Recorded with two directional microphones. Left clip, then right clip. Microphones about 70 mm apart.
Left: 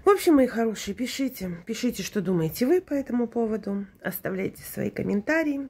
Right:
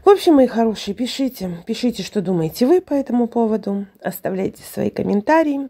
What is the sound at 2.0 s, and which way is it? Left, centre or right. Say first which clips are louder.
Speech: right 6 dB; centre.